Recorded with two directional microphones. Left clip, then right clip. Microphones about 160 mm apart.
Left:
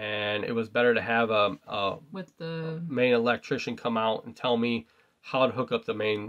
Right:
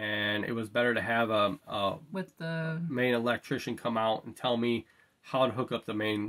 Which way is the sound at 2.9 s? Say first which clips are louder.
Left 5 dB; 30° left (ahead or behind).